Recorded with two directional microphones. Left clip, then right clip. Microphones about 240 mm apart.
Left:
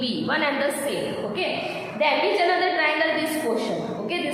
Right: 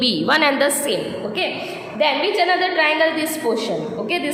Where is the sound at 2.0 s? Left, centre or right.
Right.